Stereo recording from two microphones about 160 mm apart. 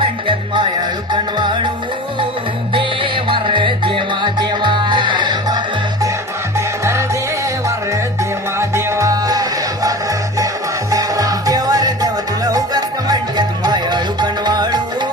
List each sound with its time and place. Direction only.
0.0 s music: 30° right (ahead or behind)
2.7 s music: 30° right (ahead or behind)
8.5 s music: 15° right (ahead or behind)
10.9 s music: 20° right (ahead or behind)